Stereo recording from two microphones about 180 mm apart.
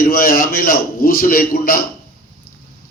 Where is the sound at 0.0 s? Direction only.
50° left (ahead or behind).